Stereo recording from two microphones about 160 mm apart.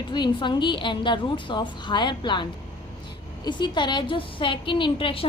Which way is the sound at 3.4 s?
30° left (ahead or behind).